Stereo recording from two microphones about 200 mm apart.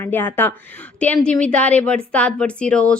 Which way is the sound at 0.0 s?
10° left (ahead or behind).